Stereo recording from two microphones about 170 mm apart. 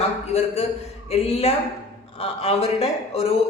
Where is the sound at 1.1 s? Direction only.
40° left (ahead or behind).